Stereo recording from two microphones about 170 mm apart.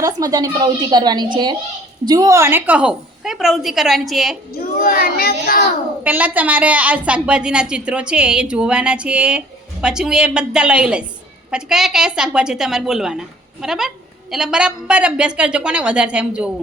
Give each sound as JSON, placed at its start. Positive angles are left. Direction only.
{"t": 0.0, "sound": "a woman's voice", "side_deg": -20}
{"t": 4.8, "sound": "a child's voice", "side_deg": 60}
{"t": 6.0, "sound": "a woman's voice", "side_deg": -10}